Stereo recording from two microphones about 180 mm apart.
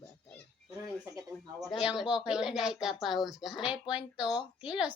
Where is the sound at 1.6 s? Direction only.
Centre (ahead or behind).